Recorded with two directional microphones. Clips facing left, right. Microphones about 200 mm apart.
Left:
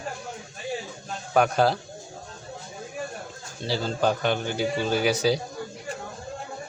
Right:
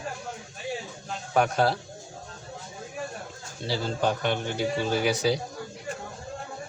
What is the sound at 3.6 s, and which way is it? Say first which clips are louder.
Speech: left 2 dB; centre (ahead or behind).